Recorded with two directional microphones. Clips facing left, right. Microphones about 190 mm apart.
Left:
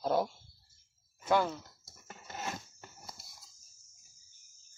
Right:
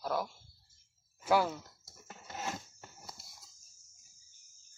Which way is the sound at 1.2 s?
5° right (ahead or behind).